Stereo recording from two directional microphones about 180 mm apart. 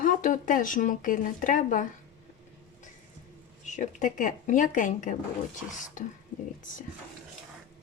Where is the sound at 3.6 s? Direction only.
45° left (ahead or behind).